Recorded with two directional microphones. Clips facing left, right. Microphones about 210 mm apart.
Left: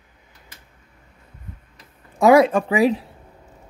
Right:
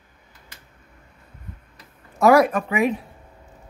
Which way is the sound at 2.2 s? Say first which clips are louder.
Left 2 dB; 20° left (ahead or behind).